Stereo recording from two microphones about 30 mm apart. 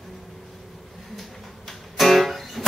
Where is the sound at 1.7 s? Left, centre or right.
Centre.